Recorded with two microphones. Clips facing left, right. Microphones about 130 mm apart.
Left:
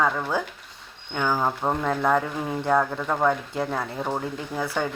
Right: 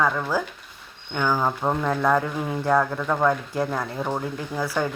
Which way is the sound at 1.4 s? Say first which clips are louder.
Right 1 dB; 5° left (ahead or behind).